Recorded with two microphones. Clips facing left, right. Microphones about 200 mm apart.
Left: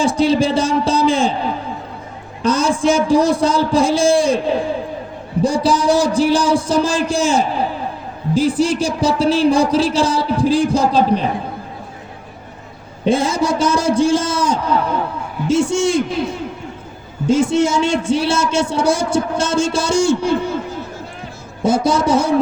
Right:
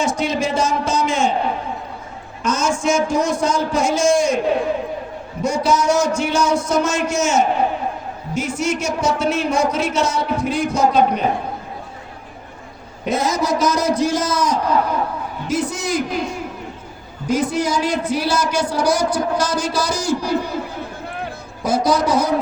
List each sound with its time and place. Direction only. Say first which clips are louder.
0.0 s speech: left 6 dB; 30° left (ahead or behind)
2.4 s speech: left 4 dB; 30° left (ahead or behind)
13.1 s a woman's voice: left 3 dB; 30° left (ahead or behind)
17.2 s a woman's voice: left 5 dB; 25° left (ahead or behind)
21.6 s a woman's voice: left 2 dB; 25° left (ahead or behind)